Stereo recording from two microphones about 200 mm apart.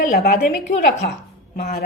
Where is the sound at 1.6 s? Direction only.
50° left (ahead or behind).